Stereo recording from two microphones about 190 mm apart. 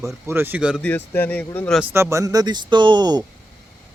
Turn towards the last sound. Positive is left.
turn(degrees=-20)  # may be behind; listen again after turning